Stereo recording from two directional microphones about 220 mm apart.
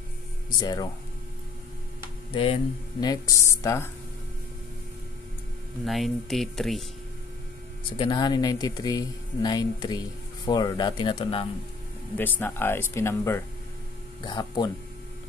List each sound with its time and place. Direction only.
0.6 s speech: 20° left (ahead or behind)
2.3 s speech: 25° left (ahead or behind)
5.9 s speech: centre (ahead or behind)
8.0 s speech: 20° left (ahead or behind)
12.2 s speech: 10° left (ahead or behind)